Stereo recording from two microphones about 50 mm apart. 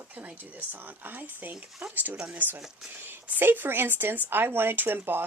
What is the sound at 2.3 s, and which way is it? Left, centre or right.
Speech, right.